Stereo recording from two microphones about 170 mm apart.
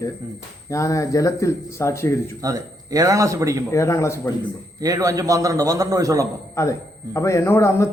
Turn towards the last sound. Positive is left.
turn(degrees=15)  # may be behind; listen again after turning